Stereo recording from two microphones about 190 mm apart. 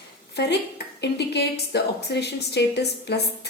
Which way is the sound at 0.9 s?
60° left (ahead or behind).